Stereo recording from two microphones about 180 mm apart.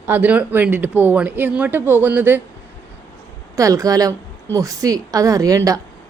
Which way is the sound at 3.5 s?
20° right (ahead or behind).